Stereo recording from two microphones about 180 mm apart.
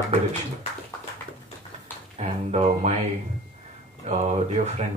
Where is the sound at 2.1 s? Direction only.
35° right (ahead or behind).